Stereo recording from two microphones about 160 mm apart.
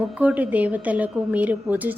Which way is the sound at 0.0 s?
10° right (ahead or behind).